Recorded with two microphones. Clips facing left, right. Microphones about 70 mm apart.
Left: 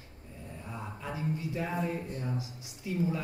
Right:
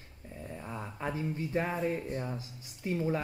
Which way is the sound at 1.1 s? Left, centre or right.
Right.